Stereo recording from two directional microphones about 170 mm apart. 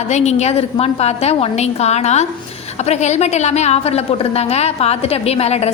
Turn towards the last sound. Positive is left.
turn(degrees=40)  # may be behind; listen again after turning